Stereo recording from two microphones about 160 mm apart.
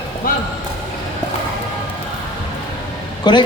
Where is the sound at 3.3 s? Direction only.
25° left (ahead or behind).